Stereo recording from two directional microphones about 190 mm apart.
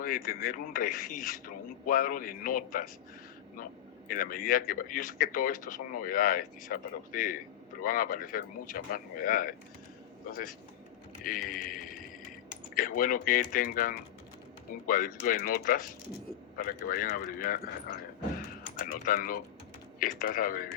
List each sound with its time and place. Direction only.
0.0 s speech: 50° left (ahead or behind)
4.1 s speech: 50° left (ahead or behind)
18.8 s speech: 50° left (ahead or behind)